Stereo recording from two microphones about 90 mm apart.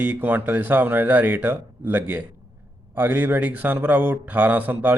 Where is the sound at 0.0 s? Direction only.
20° right (ahead or behind).